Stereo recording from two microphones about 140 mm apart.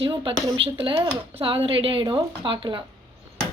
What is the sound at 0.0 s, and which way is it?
Speech, 40° right (ahead or behind).